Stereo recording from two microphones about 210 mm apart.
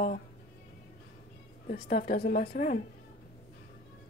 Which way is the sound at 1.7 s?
45° left (ahead or behind).